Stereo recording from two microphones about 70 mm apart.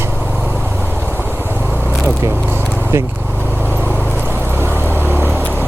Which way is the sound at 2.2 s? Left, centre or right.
Right.